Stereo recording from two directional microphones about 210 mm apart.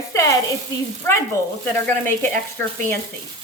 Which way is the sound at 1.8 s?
10° left (ahead or behind).